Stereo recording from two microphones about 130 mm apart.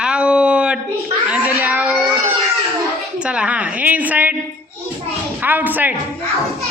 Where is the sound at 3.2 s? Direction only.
10° right (ahead or behind).